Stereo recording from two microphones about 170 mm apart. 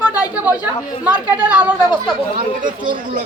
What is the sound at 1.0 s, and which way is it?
Speech, 10° right (ahead or behind).